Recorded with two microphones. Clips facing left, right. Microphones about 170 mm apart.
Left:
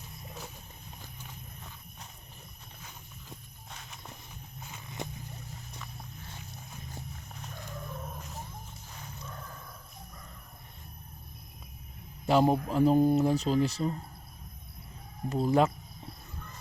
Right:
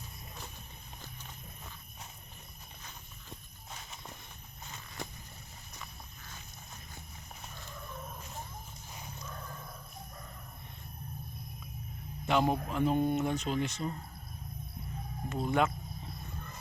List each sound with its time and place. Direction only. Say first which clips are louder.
2.8 s walk: left 3 dB; centre (ahead or behind)
12.2 s speech: left 5 dB; 35° left (ahead or behind)
15.3 s speech: left 5 dB; 35° left (ahead or behind)